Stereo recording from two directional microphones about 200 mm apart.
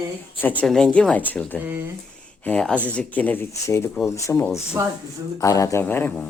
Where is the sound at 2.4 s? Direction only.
5° left (ahead or behind).